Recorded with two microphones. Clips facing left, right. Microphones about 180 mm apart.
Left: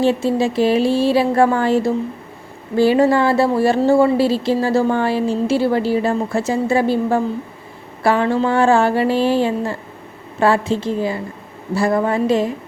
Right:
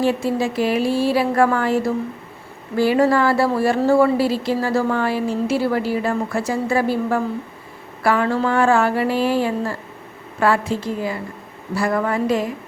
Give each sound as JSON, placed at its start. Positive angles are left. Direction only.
{"t": 0.0, "sound": "speech", "side_deg": 25}